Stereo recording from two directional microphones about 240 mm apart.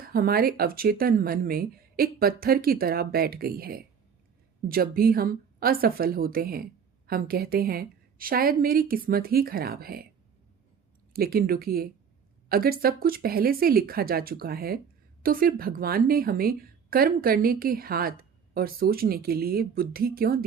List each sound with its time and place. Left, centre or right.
0.1 s a woman's voice: right
11.1 s a woman's voice: right